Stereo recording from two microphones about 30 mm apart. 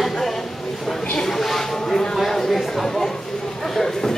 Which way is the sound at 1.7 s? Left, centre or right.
Centre.